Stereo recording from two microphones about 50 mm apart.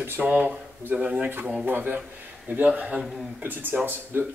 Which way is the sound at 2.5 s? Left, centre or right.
Right.